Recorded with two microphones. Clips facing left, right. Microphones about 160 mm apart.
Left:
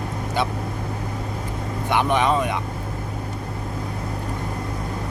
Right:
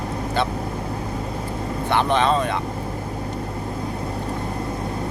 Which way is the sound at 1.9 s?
10° left (ahead or behind).